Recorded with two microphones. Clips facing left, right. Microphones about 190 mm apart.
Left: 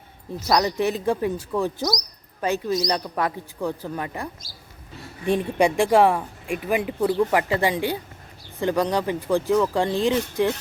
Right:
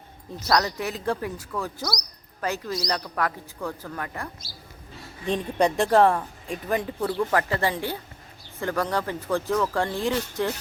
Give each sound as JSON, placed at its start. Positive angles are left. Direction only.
{"t": 0.4, "sound": "speech", "side_deg": 15}